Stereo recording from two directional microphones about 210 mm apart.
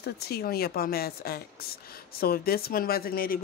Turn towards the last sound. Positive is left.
turn(degrees=45)  # may be behind; listen again after turning